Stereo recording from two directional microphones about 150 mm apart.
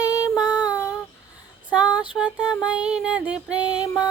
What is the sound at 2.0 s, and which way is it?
Female singing, 10° right (ahead or behind).